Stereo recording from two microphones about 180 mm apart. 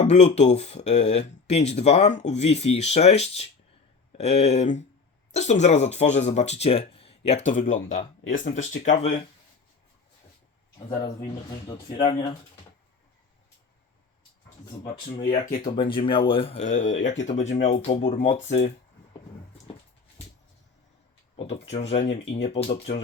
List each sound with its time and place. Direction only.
0.0 s speech: 40° left (ahead or behind)
10.8 s speech: 20° left (ahead or behind)
14.8 s speech: 35° left (ahead or behind)
19.6 s dog: 30° left (ahead or behind)
21.3 s speech: 30° left (ahead or behind)